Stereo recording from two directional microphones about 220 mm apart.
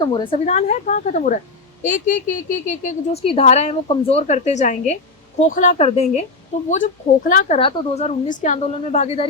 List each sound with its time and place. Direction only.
0.0 s a woman's voice: 20° left (ahead or behind)